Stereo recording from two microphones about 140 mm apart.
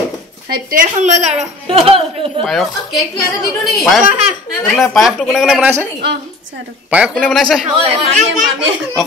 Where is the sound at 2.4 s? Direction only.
Centre (ahead or behind).